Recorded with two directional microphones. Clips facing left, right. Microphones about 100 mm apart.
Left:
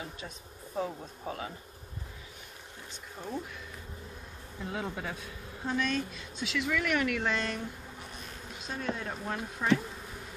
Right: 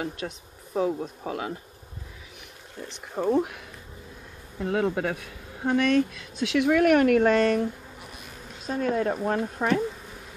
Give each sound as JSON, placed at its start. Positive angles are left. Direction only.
{"t": 0.7, "sound": "speech", "side_deg": -80}
{"t": 2.9, "sound": "speech", "side_deg": -60}
{"t": 8.6, "sound": "speech", "side_deg": -40}